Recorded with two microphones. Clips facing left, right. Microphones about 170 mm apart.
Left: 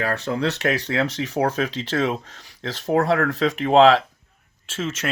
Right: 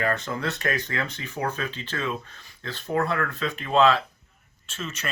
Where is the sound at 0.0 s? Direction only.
70° left (ahead or behind).